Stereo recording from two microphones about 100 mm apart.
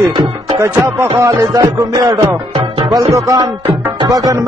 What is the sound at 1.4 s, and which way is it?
Speech, 40° right (ahead or behind).